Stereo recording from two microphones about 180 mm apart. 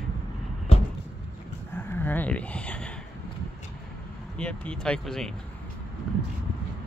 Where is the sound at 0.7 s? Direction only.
35° left (ahead or behind).